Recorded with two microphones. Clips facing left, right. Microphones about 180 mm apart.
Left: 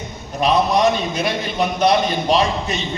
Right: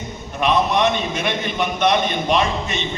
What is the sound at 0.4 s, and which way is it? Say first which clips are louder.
A man's voice: left 2 dB; 35° left (ahead or behind).